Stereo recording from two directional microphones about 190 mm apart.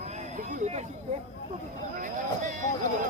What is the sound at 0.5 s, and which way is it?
Speech, 35° right (ahead or behind).